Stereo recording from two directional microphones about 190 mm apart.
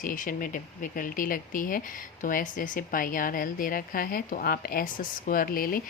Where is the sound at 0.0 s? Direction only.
45° left (ahead or behind).